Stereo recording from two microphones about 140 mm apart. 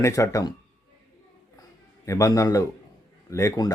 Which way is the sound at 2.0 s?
20° left (ahead or behind).